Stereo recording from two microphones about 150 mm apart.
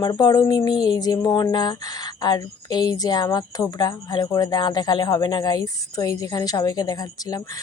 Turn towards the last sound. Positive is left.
turn(degrees=25)  # may be behind; listen again after turning